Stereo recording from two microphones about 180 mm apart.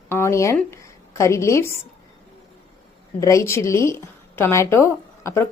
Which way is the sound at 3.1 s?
15° left (ahead or behind).